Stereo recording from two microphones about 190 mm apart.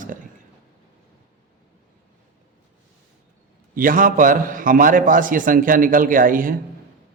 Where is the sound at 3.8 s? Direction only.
45° right (ahead or behind).